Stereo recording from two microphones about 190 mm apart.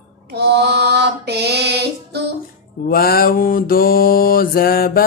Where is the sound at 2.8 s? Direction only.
55° left (ahead or behind).